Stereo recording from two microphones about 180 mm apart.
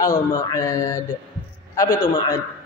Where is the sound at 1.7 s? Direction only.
20° left (ahead or behind).